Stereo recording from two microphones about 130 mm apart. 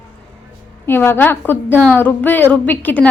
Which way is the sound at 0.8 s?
15° left (ahead or behind).